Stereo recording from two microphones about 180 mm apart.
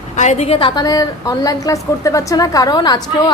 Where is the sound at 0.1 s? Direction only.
40° left (ahead or behind).